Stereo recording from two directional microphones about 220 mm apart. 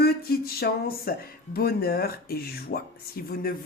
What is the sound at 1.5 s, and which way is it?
A woman's voice, 45° left (ahead or behind).